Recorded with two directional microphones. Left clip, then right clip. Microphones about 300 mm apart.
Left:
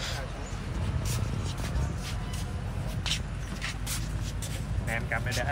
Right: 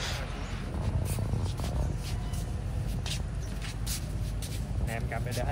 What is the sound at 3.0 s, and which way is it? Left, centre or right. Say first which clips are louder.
Vehicle: left 8 dB; left.